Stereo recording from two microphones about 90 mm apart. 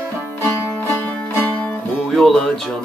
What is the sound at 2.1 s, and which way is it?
Music, 5° left (ahead or behind).